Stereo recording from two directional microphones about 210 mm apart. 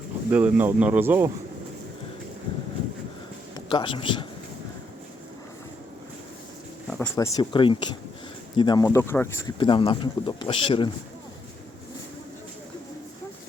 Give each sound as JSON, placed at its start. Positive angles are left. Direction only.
{"t": 0.3, "sound": "speech", "side_deg": -5}
{"t": 3.5, "sound": "a man's voice", "side_deg": 20}
{"t": 6.8, "sound": "a sound", "side_deg": 5}
{"t": 7.2, "sound": "speech", "side_deg": 20}